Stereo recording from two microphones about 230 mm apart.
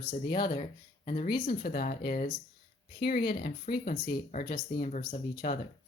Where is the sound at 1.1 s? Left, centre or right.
Left.